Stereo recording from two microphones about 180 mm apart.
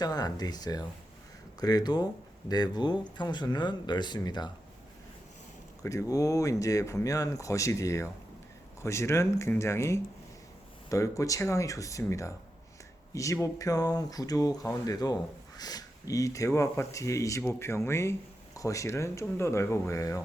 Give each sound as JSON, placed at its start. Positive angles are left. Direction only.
{"t": 0.0, "sound": "speech", "side_deg": 20}
{"t": 5.8, "sound": "speech", "side_deg": 15}